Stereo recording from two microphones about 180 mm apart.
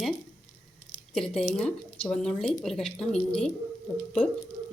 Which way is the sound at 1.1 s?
5° left (ahead or behind).